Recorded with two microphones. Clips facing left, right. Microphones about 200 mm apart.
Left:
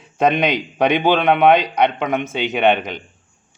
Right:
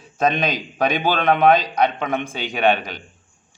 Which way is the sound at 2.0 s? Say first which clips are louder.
Left 4 dB; 15° left (ahead or behind).